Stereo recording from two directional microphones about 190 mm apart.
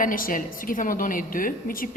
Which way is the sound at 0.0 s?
45° left (ahead or behind).